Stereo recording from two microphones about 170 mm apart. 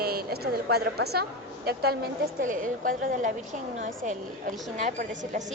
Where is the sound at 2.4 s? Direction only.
50° right (ahead or behind).